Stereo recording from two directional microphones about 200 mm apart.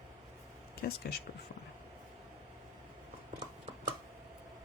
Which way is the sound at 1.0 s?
50° left (ahead or behind).